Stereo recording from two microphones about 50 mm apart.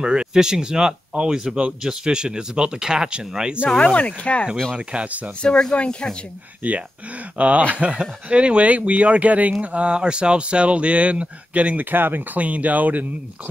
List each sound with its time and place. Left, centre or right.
0.0 s speech: centre
3.7 s speech: left
4.7 s speech: right
5.4 s speech: centre
6.6 s speech: right
12.4 s speech: right